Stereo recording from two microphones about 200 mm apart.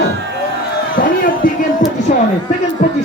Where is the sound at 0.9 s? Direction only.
45° left (ahead or behind).